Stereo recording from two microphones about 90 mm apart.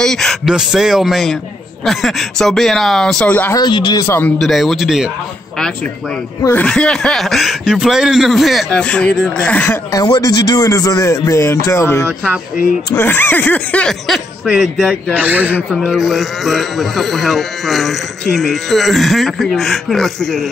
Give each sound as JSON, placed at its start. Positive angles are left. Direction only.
{"t": 0.0, "sound": "speech", "side_deg": 5}
{"t": 0.5, "sound": "speech", "side_deg": -5}
{"t": 3.3, "sound": "a man's voice", "side_deg": 20}
{"t": 3.5, "sound": "speech", "side_deg": 55}
{"t": 4.0, "sound": "a man's voice", "side_deg": 25}
{"t": 4.4, "sound": "speech", "side_deg": 0}
{"t": 6.5, "sound": "speech", "side_deg": 10}
{"t": 8.8, "sound": "speech", "side_deg": 10}
{"t": 9.9, "sound": "speech", "side_deg": 45}
{"t": 15.1, "sound": "speech", "side_deg": -20}
{"t": 15.7, "sound": "speech", "side_deg": 0}